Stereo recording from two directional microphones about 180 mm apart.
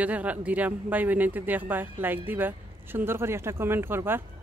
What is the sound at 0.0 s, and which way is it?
A man's voice, 10° right (ahead or behind).